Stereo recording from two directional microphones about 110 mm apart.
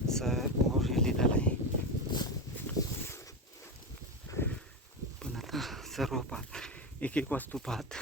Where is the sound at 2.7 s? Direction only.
25° left (ahead or behind).